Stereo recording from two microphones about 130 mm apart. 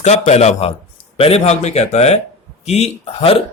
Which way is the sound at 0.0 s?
60° left (ahead or behind).